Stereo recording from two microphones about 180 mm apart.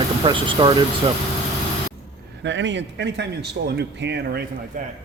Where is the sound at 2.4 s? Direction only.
90° right; by 4.4 s 70° right (ahead or behind).